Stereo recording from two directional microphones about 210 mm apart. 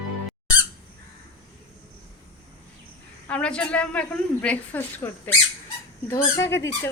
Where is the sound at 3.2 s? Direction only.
5° left (ahead or behind).